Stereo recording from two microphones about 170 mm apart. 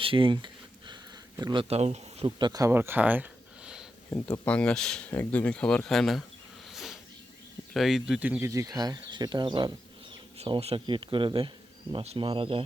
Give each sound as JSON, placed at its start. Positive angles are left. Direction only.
{"t": 0.0, "sound": "a sound", "side_deg": -30}
{"t": 1.4, "sound": "speech", "side_deg": -25}
{"t": 1.7, "sound": "speech", "side_deg": -40}
{"t": 4.1, "sound": "speech", "side_deg": 10}
{"t": 6.7, "sound": "a sound", "side_deg": 0}
{"t": 7.7, "sound": "speech", "side_deg": 0}
{"t": 8.4, "sound": "speech", "side_deg": -20}